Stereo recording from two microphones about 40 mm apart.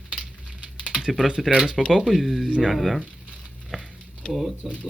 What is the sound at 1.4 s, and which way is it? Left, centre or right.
Speech, centre.